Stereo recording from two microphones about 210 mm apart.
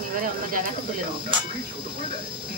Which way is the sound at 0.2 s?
40° right (ahead or behind).